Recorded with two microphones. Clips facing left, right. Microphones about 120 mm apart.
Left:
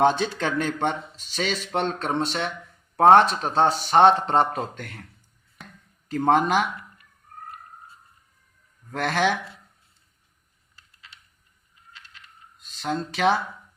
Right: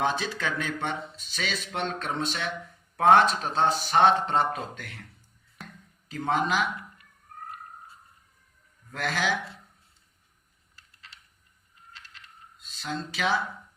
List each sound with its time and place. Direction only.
0.2 s a man's voice: 50° left (ahead or behind)
6.1 s speech: 50° left (ahead or behind)
8.9 s speech: 50° left (ahead or behind)
12.5 s a sound: 50° left (ahead or behind)
13.1 s speech: 50° left (ahead or behind)